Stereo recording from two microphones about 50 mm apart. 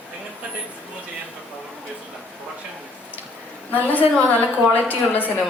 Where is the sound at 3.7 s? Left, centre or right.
Left.